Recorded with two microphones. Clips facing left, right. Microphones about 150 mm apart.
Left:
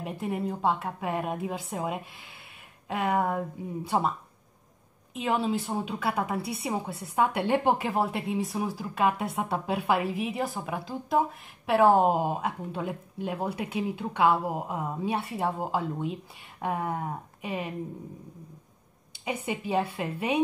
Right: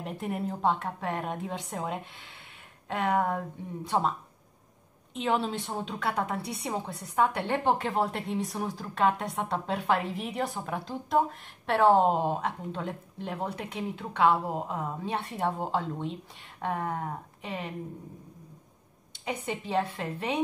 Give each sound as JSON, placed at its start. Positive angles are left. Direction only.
{"t": 0.0, "sound": "a woman's voice", "side_deg": 0}
{"t": 5.1, "sound": "a woman's voice", "side_deg": 0}
{"t": 19.2, "sound": "a woman's voice", "side_deg": 10}